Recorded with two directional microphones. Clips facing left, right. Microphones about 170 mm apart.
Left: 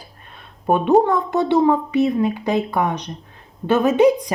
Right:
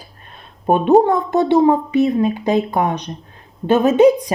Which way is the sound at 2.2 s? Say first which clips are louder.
Right 3 dB; 20° right (ahead or behind).